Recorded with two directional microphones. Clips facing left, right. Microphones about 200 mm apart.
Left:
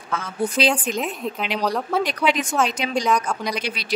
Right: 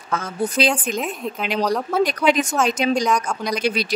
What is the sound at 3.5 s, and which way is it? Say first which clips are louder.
Speech: right 7 dB; 45° right (ahead or behind).